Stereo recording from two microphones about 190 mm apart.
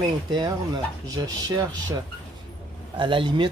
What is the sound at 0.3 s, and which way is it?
Speech, 20° right (ahead or behind).